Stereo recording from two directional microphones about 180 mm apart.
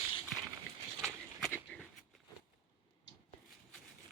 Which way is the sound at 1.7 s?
10° left (ahead or behind).